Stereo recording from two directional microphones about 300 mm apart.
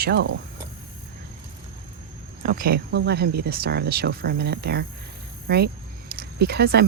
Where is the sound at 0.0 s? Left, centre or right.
Right.